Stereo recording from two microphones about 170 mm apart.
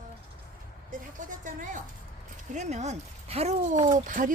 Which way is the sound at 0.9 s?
50° right (ahead or behind).